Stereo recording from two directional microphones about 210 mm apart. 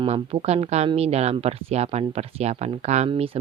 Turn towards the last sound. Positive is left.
turn(degrees=-30)  # may be behind; listen again after turning